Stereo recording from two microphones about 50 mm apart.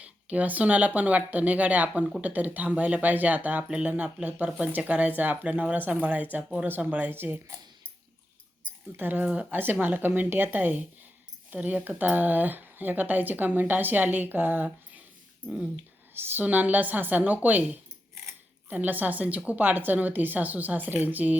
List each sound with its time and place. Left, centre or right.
0.0 s speech: right
8.9 s speech: right
9.2 s speech: right
9.5 s speech: right
16.1 s speech: right
16.4 s speech: right
18.7 s speech: right